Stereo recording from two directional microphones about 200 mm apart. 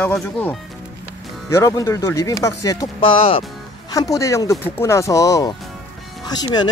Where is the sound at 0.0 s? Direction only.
10° left (ahead or behind).